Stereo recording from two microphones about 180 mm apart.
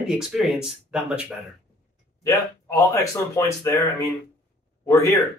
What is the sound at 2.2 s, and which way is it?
Speech, 15° left (ahead or behind).